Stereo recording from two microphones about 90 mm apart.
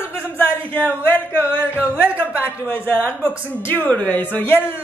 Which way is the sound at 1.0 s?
20° left (ahead or behind).